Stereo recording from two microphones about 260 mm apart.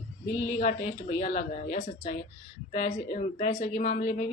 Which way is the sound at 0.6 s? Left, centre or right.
Left.